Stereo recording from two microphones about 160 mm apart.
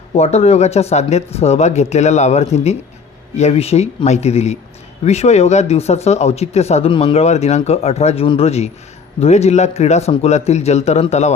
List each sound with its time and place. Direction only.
0.1 s a man's voice: 40° left (ahead or behind)